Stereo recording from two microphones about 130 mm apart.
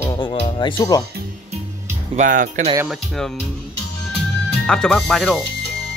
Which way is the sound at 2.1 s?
90° right.